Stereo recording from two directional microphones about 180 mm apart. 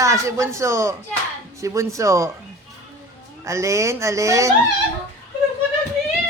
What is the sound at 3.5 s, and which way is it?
A man's voice, 15° right (ahead or behind).